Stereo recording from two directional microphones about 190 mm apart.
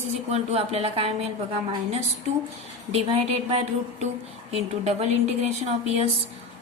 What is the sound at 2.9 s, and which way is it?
A woman's voice, 30° right (ahead or behind).